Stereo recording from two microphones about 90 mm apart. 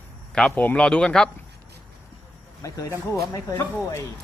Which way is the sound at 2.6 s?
40° left (ahead or behind).